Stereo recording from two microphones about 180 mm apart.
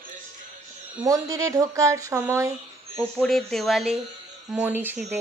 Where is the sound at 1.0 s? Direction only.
20° right (ahead or behind).